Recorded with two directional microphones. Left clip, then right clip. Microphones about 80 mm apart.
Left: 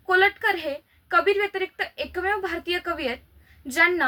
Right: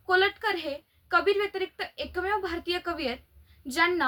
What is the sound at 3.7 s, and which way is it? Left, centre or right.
Speech, right.